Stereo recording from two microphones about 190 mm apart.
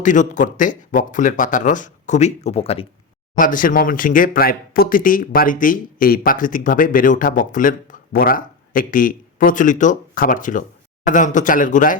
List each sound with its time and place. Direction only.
0.0 s speech: 40° left (ahead or behind)
3.3 s speech: 45° left (ahead or behind)